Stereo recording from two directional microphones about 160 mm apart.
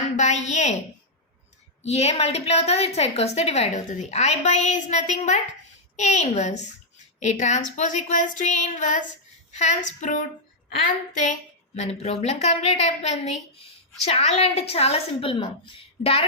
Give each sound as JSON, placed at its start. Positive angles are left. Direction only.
{"t": 0.2, "sound": "a woman's voice", "side_deg": 45}
{"t": 1.8, "sound": "a woman's voice", "side_deg": 40}
{"t": 11.2, "sound": "speech", "side_deg": 45}